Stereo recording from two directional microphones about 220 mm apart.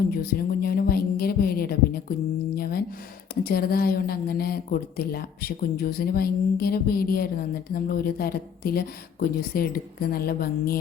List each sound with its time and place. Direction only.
0.1 s a woman's voice: 45° left (ahead or behind)